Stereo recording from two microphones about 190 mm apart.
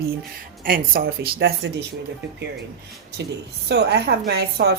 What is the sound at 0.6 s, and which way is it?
Speech, 50° right (ahead or behind).